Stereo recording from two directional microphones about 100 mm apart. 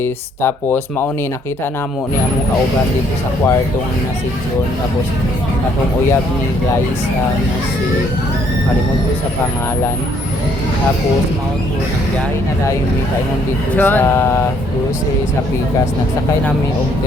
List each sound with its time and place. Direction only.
0.0 s speech: 25° left (ahead or behind)
13.7 s speech: 20° left (ahead or behind)